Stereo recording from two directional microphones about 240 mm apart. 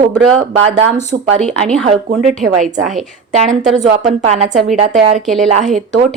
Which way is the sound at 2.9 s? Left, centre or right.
Right.